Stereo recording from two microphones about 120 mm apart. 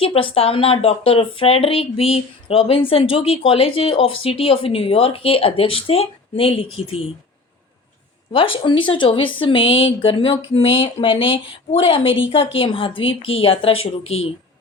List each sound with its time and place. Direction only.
0.0 s speech: 50° left (ahead or behind)
8.3 s speech: 50° left (ahead or behind)